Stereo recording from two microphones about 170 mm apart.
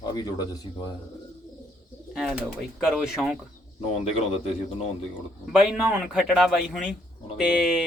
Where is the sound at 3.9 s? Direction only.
35° left (ahead or behind).